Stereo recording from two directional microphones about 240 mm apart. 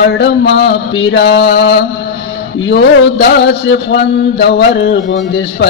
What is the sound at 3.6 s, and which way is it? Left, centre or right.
Speech, left.